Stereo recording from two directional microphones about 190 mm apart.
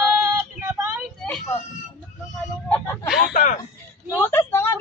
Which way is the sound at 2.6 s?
10° left (ahead or behind).